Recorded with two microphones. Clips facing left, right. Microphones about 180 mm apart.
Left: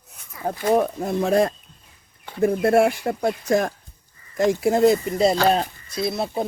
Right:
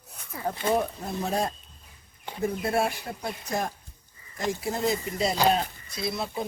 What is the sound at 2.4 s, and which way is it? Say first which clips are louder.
Speech: left 9 dB; 75° left (ahead or behind).